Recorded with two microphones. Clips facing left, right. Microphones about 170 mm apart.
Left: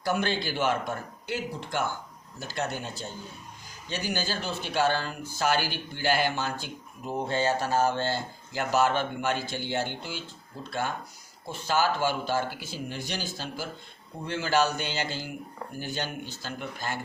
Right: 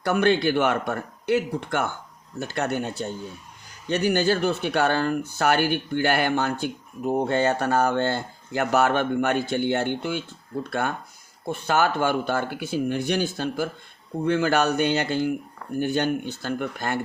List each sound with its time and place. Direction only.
0.0 s speech: 60° right (ahead or behind)